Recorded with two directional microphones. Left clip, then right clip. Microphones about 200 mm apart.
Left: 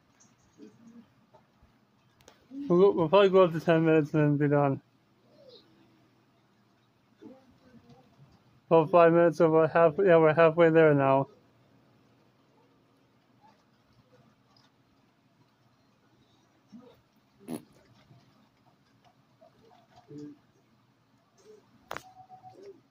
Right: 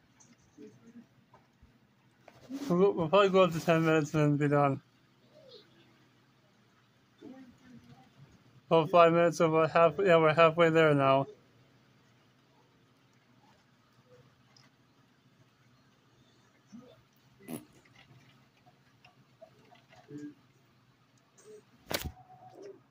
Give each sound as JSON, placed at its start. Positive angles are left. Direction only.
{"t": 2.7, "sound": "speech", "side_deg": 20}
{"t": 8.6, "sound": "speech", "side_deg": 15}